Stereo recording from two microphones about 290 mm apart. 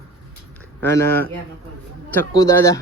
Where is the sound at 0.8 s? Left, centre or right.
Centre.